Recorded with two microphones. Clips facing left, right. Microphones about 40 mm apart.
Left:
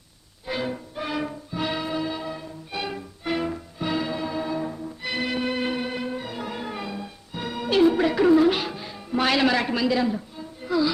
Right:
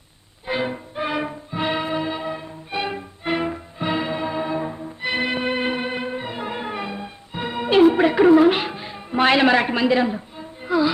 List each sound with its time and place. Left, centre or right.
0.4 s music: right